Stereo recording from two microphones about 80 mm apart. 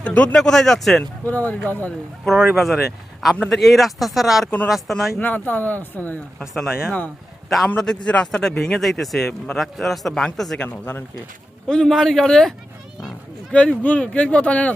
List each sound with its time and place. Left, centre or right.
0.0 s speech: centre
1.2 s speech: left
2.2 s speech: centre
5.2 s speech: left
6.4 s speech: centre
8.0 s speech: centre
10.6 s speech: centre
11.7 s speech: centre